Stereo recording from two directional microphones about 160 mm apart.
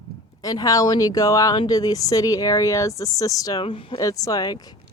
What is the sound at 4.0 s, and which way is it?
Speech, 20° left (ahead or behind).